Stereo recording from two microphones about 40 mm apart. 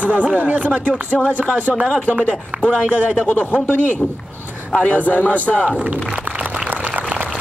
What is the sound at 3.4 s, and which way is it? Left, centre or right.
Speech, left.